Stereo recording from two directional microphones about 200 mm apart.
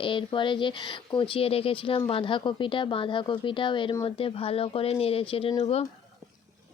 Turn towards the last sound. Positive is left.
turn(degrees=30)  # may be behind; listen again after turning